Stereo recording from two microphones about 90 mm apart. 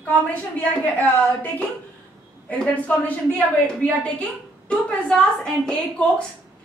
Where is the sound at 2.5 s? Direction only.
15° left (ahead or behind).